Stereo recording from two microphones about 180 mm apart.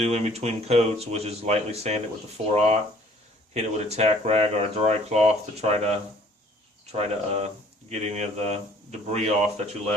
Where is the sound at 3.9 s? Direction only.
35° right (ahead or behind).